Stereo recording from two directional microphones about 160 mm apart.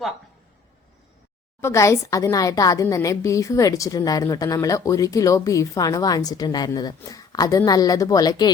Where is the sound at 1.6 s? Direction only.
20° left (ahead or behind).